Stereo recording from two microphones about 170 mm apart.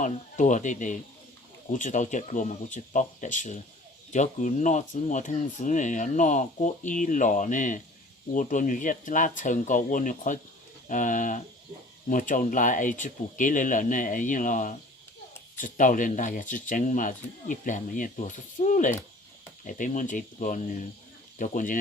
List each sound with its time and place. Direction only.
0.0 s speech: 45° left (ahead or behind)